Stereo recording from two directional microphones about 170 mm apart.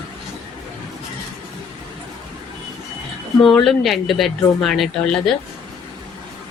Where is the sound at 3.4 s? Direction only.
Centre (ahead or behind).